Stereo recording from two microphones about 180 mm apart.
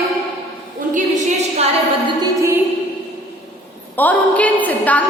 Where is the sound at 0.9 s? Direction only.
45° right (ahead or behind).